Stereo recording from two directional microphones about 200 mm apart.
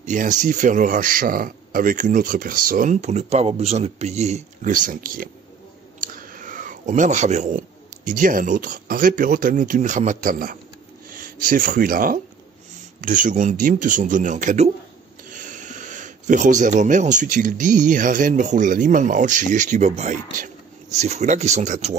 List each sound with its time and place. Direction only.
0.0 s a man's voice: 40° right (ahead or behind)